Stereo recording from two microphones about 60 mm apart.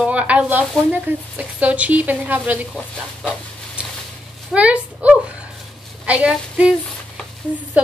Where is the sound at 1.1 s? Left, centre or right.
Right.